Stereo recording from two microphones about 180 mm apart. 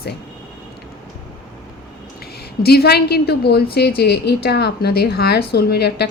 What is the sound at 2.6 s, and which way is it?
A woman's voice, 60° left (ahead or behind).